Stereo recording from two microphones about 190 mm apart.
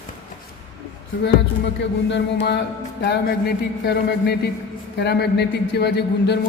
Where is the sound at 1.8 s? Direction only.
65° left (ahead or behind).